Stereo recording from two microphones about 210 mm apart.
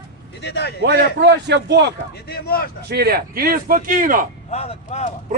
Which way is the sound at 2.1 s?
45° left (ahead or behind).